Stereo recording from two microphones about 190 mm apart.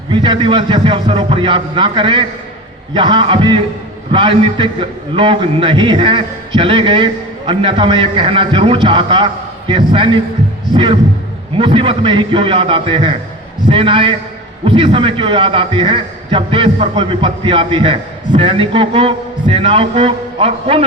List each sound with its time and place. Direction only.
0.1 s a man's voice: 25° right (ahead or behind)
11.5 s a man's voice: 25° right (ahead or behind)